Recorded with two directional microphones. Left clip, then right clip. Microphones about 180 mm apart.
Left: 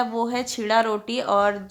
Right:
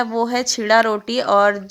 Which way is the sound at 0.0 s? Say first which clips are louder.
Right 5 dB; 35° right (ahead or behind).